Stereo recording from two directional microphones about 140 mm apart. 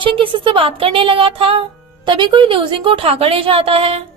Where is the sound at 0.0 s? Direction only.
35° right (ahead or behind).